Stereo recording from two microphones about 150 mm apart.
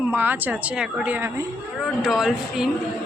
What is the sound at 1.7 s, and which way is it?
Speech, 5° right (ahead or behind).